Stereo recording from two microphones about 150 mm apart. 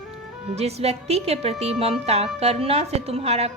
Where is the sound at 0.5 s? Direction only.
45° right (ahead or behind).